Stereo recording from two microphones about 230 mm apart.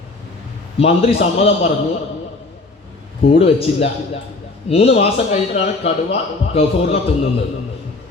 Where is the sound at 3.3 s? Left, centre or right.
Left.